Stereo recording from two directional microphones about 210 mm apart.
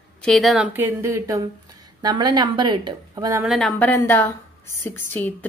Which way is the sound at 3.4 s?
Centre (ahead or behind).